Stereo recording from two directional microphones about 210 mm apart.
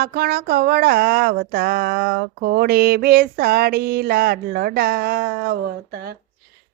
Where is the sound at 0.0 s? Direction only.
50° right (ahead or behind).